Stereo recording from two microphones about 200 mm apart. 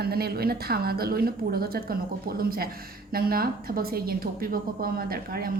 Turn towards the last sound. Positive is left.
turn(degrees=-50)  # may be behind; listen again after turning